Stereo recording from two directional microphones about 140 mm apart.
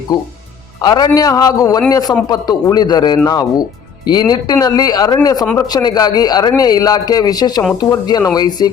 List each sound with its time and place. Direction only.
0.8 s speech: 30° left (ahead or behind)